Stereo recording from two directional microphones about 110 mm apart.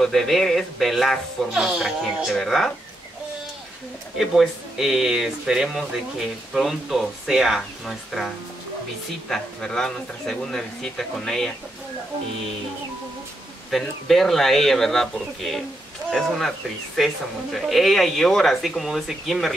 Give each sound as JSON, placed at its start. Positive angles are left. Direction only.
{"t": 0.0, "sound": "speech", "side_deg": 5}
{"t": 4.2, "sound": "speech", "side_deg": 0}
{"t": 9.3, "sound": "speech", "side_deg": 5}
{"t": 13.7, "sound": "speech", "side_deg": 0}